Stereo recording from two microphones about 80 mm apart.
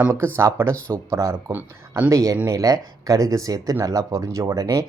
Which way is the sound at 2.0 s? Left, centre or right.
Right.